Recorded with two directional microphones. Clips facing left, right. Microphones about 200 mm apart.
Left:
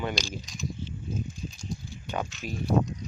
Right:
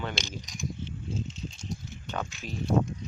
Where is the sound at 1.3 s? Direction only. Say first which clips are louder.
Left 1 dB; 25° right (ahead or behind).